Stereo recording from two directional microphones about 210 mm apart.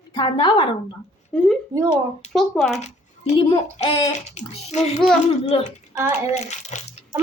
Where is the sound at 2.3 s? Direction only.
Centre (ahead or behind).